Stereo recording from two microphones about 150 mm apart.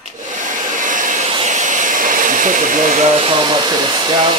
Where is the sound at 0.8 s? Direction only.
60° right (ahead or behind).